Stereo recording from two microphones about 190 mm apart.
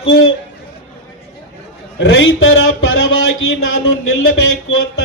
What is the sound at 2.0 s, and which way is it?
A man's voice, 75° left (ahead or behind).